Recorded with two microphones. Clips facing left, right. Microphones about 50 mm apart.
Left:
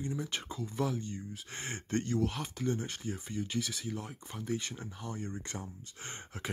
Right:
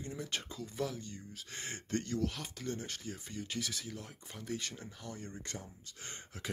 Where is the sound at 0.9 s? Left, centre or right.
Left; by 3.8 s centre.